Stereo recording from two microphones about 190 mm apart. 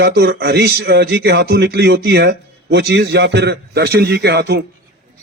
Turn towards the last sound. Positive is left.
turn(degrees=-60)  # may be behind; listen again after turning